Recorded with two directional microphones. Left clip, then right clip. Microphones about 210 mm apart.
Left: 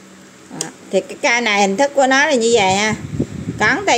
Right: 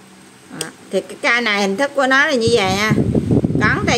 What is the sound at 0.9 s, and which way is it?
A woman's voice, 5° left (ahead or behind).